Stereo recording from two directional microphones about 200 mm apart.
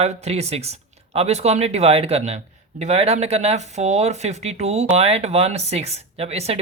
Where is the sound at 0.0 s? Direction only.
30° right (ahead or behind).